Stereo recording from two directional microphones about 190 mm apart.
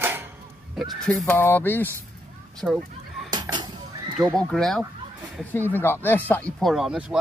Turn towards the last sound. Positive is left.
turn(degrees=-5)  # may be behind; listen again after turning